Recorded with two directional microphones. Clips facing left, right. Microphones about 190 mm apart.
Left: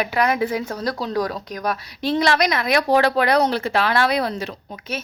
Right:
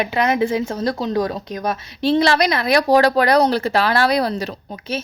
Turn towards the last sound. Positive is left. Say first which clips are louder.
# right 4 dB
turn(degrees=-35)  # may be behind; listen again after turning